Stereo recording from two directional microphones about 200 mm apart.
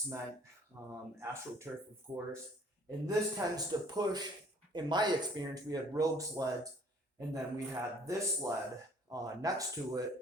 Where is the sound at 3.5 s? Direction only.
20° right (ahead or behind).